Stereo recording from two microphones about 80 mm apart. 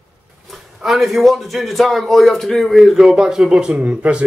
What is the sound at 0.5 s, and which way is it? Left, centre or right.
A man's voice, centre.